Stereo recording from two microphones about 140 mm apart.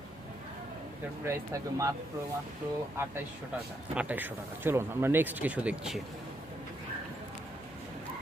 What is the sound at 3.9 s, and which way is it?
Speech, 10° right (ahead or behind).